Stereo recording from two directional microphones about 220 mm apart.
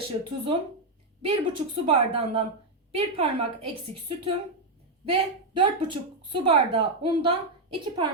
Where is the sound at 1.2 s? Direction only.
25° right (ahead or behind).